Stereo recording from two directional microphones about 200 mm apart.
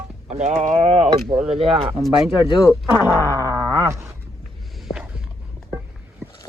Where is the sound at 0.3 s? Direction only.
35° right (ahead or behind).